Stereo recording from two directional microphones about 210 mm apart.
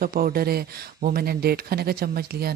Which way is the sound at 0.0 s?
45° right (ahead or behind).